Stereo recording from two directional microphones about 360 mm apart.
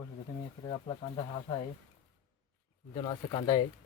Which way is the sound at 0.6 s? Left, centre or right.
Centre.